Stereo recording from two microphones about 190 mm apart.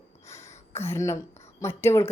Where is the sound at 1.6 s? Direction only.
15° left (ahead or behind).